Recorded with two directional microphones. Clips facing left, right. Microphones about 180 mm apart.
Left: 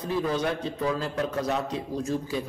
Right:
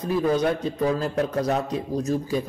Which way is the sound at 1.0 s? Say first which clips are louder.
Right 4 dB; 40° right (ahead or behind).